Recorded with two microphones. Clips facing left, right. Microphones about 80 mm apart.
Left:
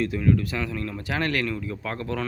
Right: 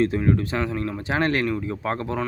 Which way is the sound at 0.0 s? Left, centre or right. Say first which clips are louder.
Right 2 dB; right.